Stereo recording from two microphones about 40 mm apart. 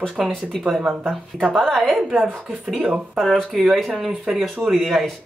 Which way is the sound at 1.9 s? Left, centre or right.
Centre.